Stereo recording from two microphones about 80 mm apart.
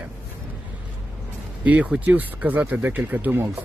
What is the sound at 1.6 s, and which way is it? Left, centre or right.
Speech, centre.